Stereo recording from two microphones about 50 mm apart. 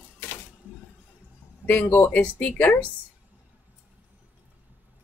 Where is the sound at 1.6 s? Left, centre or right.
Left.